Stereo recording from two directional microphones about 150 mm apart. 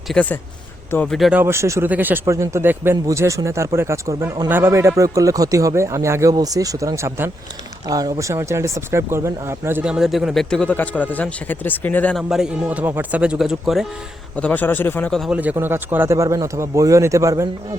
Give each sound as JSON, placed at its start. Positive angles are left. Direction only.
{"t": 0.1, "sound": "speech", "side_deg": 10}
{"t": 1.1, "sound": "speech", "side_deg": 0}
{"t": 1.4, "sound": "speech", "side_deg": -15}
{"t": 12.1, "sound": "speech", "side_deg": -5}
{"t": 14.3, "sound": "speech", "side_deg": 10}
{"t": 15.2, "sound": "speech", "side_deg": -10}